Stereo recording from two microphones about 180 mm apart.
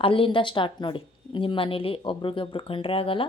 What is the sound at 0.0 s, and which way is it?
A woman's voice, 30° left (ahead or behind).